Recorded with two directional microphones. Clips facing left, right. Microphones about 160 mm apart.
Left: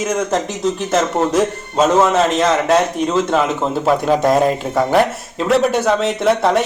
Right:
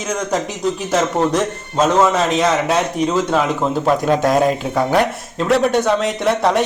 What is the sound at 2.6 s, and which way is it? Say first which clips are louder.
A man's voice: left 2 dB; centre (ahead or behind).